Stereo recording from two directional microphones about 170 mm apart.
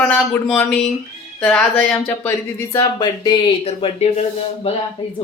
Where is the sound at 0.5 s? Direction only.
10° left (ahead or behind).